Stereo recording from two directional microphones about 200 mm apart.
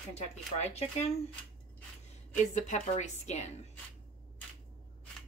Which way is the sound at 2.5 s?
35° left (ahead or behind).